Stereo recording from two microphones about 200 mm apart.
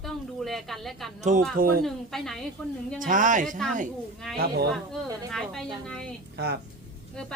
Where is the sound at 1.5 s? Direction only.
45° right (ahead or behind).